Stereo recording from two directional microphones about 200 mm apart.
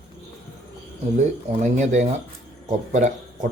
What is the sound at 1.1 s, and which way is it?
Speech, 35° right (ahead or behind).